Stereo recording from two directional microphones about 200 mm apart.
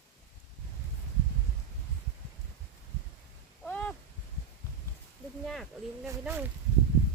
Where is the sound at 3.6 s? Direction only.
5° left (ahead or behind).